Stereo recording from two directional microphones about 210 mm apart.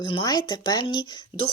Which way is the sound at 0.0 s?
20° left (ahead or behind).